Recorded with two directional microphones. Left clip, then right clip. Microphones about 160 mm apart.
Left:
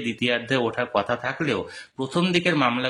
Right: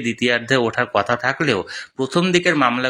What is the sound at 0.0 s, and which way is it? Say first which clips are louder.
Speech: right 5 dB; 25° right (ahead or behind).